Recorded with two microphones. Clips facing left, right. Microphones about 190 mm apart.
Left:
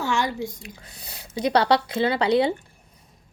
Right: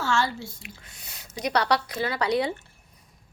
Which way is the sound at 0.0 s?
15° left (ahead or behind).